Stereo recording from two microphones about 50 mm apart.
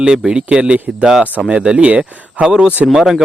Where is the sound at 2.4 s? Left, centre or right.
Centre.